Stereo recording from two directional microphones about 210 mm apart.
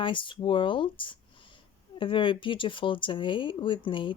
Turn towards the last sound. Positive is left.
turn(degrees=25)  # may be behind; listen again after turning